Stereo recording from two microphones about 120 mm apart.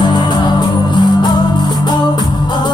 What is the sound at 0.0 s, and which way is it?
Music, 40° left (ahead or behind).